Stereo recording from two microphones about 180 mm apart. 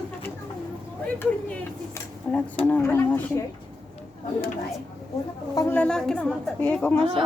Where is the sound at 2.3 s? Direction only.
10° left (ahead or behind).